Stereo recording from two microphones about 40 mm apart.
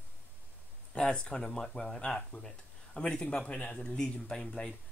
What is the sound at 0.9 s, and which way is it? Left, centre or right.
Speech, left.